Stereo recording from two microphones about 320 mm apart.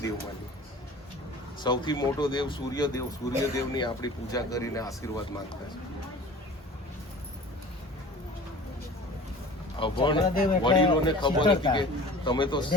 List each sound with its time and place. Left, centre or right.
1.6 s speech: centre
9.7 s speech: centre